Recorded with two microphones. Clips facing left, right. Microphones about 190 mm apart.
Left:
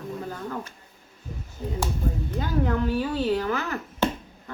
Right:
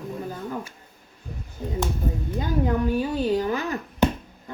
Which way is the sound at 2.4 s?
15° right (ahead or behind).